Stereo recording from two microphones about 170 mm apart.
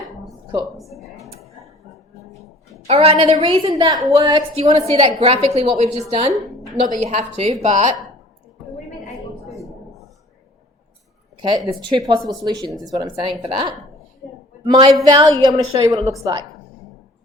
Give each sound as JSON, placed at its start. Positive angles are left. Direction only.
{"t": 0.8, "sound": "speech", "side_deg": 0}
{"t": 2.8, "sound": "a woman's voice", "side_deg": -35}
{"t": 11.3, "sound": "a woman's voice", "side_deg": -25}